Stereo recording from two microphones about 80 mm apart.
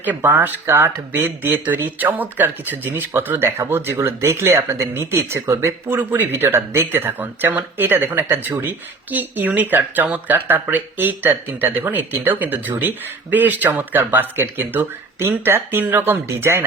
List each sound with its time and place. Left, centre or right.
0.0 s speech: right